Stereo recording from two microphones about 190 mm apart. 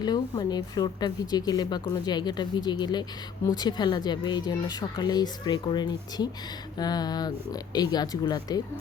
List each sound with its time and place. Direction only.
0.0 s speech: 20° left (ahead or behind)